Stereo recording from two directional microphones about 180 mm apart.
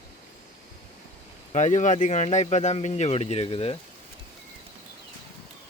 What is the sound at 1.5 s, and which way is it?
Speech, 40° left (ahead or behind).